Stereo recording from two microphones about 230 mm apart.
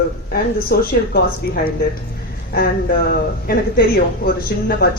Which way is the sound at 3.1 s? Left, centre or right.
Left.